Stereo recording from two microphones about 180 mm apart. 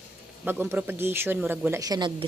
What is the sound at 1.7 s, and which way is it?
Speech, 20° right (ahead or behind).